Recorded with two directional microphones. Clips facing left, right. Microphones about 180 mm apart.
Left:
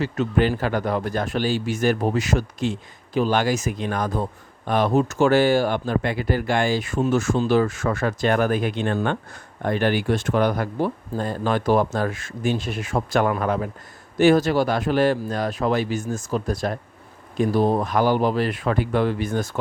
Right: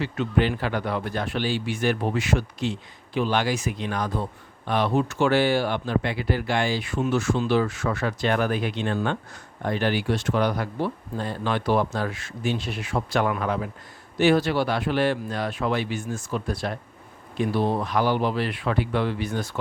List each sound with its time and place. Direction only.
0.0 s a man's voice: 45° left (ahead or behind)